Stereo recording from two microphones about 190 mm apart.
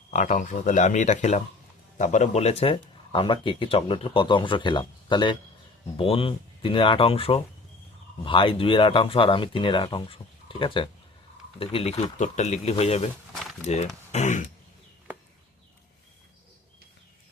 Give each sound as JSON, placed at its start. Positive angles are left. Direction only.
{"t": 0.1, "sound": "speech", "side_deg": 40}